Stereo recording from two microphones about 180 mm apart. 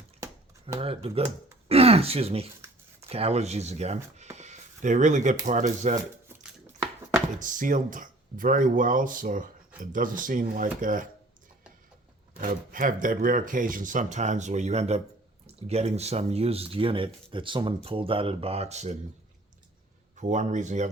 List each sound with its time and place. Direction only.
0.8 s speech: 30° right (ahead or behind)
4.4 s a sound: 40° right (ahead or behind)
5.5 s speech: 40° right (ahead or behind)
7.3 s speech: 45° right (ahead or behind)
12.4 s speech: 50° right (ahead or behind)
20.1 s speech: 45° right (ahead or behind)